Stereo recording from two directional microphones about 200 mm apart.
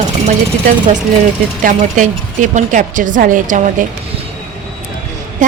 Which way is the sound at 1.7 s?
40° right (ahead or behind).